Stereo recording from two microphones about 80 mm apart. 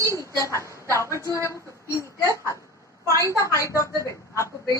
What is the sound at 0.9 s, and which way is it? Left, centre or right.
Speech, right.